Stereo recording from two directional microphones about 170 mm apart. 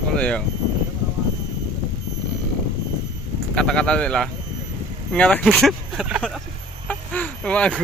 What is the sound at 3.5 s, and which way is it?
Speech, 5° left (ahead or behind).